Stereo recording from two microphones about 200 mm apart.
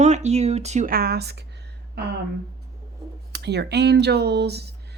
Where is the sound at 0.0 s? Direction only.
35° right (ahead or behind).